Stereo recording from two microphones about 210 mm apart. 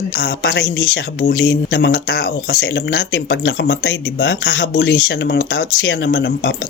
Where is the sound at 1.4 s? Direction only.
55° left (ahead or behind).